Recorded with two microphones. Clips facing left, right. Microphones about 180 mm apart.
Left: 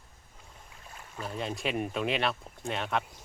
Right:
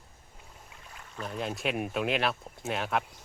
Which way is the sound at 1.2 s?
Centre (ahead or behind).